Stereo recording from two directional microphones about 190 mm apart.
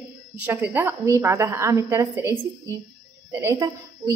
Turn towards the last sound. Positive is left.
turn(degrees=-20)  # may be behind; listen again after turning